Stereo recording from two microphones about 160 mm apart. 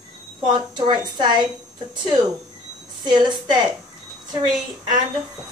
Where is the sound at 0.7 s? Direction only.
30° right (ahead or behind).